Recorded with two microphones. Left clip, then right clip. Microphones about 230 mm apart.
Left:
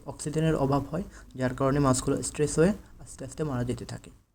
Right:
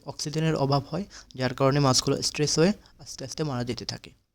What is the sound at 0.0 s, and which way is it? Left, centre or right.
A man's voice, right.